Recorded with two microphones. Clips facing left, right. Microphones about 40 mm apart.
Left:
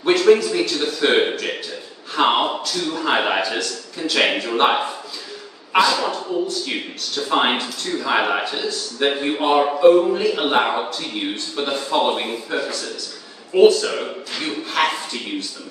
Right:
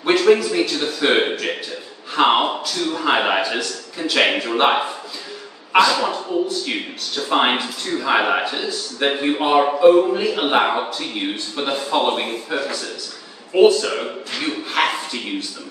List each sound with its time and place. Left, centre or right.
0.0 s speech: centre